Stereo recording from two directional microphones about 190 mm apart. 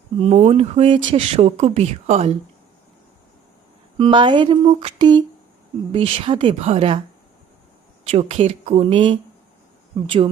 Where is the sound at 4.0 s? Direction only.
25° right (ahead or behind).